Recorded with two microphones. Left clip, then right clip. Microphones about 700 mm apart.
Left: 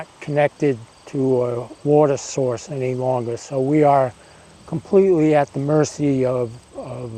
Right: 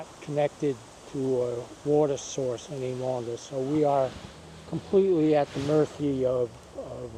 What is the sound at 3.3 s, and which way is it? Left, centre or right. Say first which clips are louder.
Speech: left 9 dB; left.